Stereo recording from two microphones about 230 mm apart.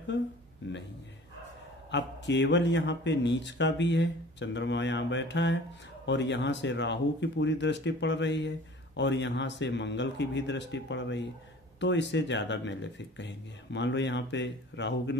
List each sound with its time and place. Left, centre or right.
0.6 s speech: left
1.9 s speech: left